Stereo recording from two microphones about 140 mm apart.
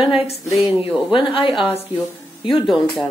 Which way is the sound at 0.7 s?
40° left (ahead or behind).